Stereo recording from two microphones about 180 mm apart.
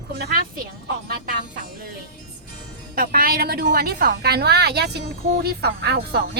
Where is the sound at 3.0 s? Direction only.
55° right (ahead or behind).